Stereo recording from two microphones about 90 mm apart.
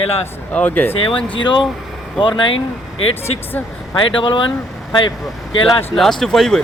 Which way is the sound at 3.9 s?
65° left (ahead or behind).